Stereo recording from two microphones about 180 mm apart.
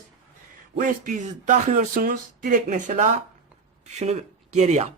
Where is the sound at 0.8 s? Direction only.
45° right (ahead or behind).